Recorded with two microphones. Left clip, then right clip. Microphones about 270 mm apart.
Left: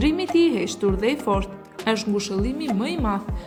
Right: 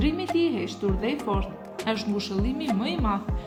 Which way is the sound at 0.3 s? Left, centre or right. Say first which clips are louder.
Left 6 dB; left.